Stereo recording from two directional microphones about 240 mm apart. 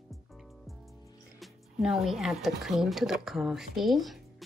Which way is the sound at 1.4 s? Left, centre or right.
Centre.